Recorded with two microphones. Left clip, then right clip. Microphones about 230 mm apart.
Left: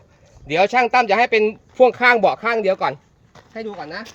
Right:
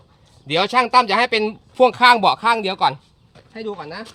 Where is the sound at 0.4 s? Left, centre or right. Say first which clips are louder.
Left 1 dB; right.